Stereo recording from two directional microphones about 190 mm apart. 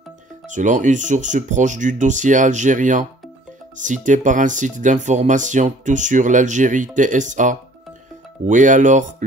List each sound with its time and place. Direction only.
0.5 s speech: 40° right (ahead or behind)